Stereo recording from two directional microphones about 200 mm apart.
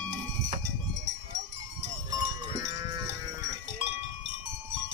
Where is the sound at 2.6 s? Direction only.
20° right (ahead or behind).